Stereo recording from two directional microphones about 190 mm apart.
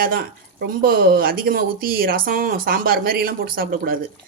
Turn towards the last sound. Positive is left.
turn(degrees=-50)  # may be behind; listen again after turning